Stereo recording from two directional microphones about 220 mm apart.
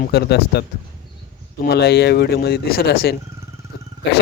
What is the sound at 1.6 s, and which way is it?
Speech, 50° left (ahead or behind).